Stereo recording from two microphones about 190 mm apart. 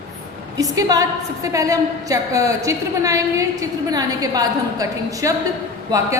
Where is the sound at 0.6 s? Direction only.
20° right (ahead or behind).